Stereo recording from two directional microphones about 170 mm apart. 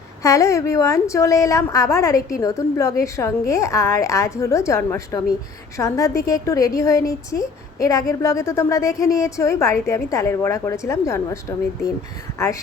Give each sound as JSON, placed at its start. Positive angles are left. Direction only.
{"t": 0.2, "sound": "a woman's voice", "side_deg": 20}